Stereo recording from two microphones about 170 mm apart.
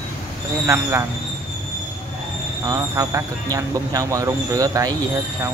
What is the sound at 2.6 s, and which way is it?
Speech, 20° right (ahead or behind).